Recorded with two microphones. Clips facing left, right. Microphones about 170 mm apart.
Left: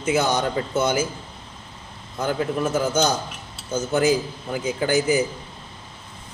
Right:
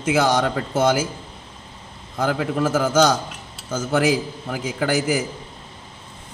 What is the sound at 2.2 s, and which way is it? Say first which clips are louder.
A man's voice: right 2 dB; 90° right.